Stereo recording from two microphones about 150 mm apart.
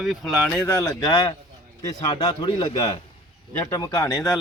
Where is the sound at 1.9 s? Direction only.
25° left (ahead or behind).